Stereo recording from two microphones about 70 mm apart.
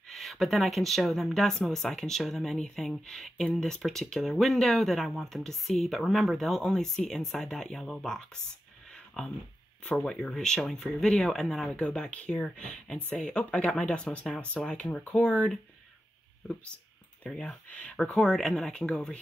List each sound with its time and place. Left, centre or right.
0.1 s speech: centre
8.9 s a sound: centre
9.8 s speech: centre
17.2 s speech: centre
18.1 s speech: centre